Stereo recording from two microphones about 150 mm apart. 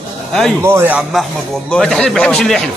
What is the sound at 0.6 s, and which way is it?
Speech, 15° right (ahead or behind).